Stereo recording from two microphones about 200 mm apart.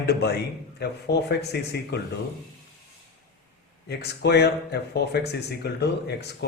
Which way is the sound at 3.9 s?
55° left (ahead or behind).